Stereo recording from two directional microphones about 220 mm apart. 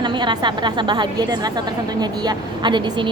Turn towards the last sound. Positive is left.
turn(degrees=-20)  # may be behind; listen again after turning